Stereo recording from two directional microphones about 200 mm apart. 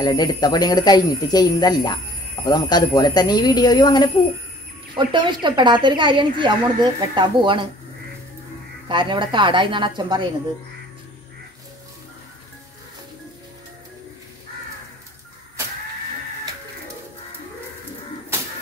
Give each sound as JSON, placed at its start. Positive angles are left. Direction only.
{"t": 0.0, "sound": "speech", "side_deg": 20}
{"t": 4.9, "sound": "speech", "side_deg": -25}
{"t": 8.8, "sound": "speech", "side_deg": -25}